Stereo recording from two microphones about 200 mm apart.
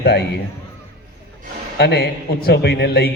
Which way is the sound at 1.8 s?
55° left (ahead or behind).